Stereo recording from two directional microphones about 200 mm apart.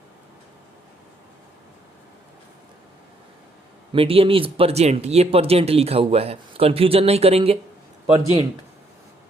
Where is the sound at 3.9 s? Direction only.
30° right (ahead or behind).